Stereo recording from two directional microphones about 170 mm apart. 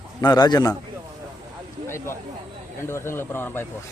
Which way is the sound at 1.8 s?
15° left (ahead or behind).